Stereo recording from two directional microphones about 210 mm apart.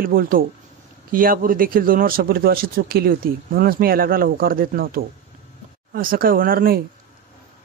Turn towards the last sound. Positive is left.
turn(degrees=-45)  # may be behind; listen again after turning